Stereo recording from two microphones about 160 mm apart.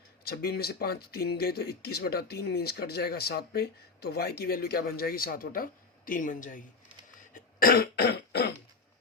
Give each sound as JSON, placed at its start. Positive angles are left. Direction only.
{"t": 0.3, "sound": "speech", "side_deg": 80}
{"t": 7.3, "sound": "cough", "side_deg": 65}